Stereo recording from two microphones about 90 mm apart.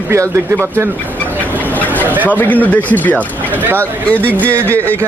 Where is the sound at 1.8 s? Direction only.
20° left (ahead or behind).